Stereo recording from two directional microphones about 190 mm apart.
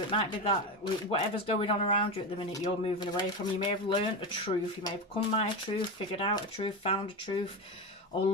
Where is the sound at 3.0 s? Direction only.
25° left (ahead or behind).